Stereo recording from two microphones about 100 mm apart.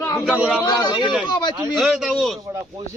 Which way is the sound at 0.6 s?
35° left (ahead or behind).